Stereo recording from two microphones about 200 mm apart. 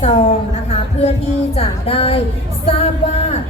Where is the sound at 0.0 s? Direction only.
35° left (ahead or behind).